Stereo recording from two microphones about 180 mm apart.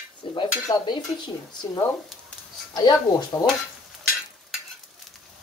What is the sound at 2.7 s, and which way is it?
Speech, 25° left (ahead or behind).